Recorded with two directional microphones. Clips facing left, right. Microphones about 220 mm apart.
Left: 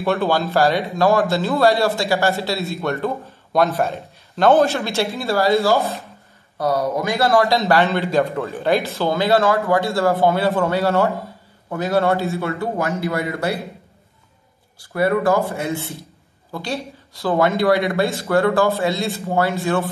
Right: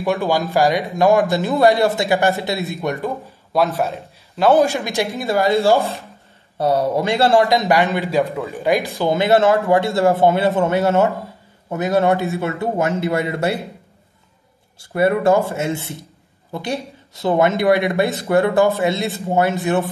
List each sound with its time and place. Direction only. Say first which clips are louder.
0.0 s a man's voice: even; 15° right (ahead or behind)
3.6 s a man's voice: even; centre (ahead or behind)
4.6 s a man's voice: right 1 dB; 15° right (ahead or behind)
5.6 s a man's voice: right 2 dB; 30° right (ahead or behind)
7.5 s a man's voice: right 1 dB; 15° right (ahead or behind)
8.2 s speech: even; centre (ahead or behind)
8.5 s a man's voice: right 1 dB; 15° right (ahead or behind)
14.8 s a man's voice: right 2 dB; 25° right (ahead or behind)